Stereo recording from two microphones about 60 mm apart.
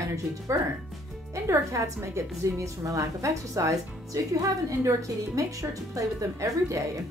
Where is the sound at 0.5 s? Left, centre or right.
Right.